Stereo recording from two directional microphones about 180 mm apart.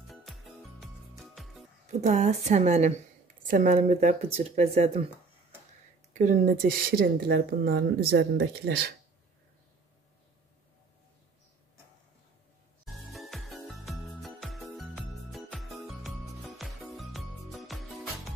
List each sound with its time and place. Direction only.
0.1 s music: centre (ahead or behind)
1.9 s speech: 40° right (ahead or behind)
6.1 s speech: 45° right (ahead or behind); by 8.9 s 60° right (ahead or behind)
13.1 s music: centre (ahead or behind)